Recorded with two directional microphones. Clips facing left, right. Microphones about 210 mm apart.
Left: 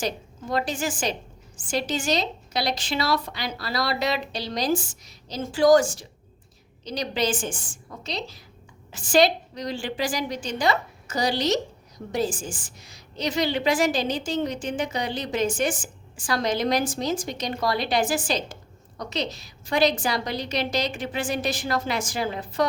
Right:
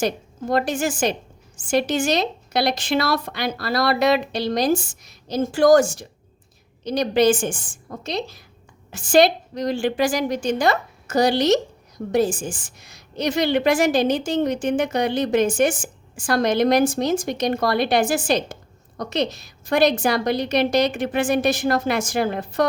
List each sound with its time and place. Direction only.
0.0 s a woman's voice: 55° right (ahead or behind)
12.8 s a woman's voice: 55° right (ahead or behind)